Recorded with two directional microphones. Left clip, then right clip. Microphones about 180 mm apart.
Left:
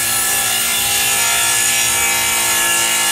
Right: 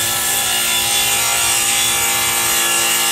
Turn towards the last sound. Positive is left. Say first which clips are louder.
# left 1 dB
turn(degrees=0)  # may be behind; listen again after turning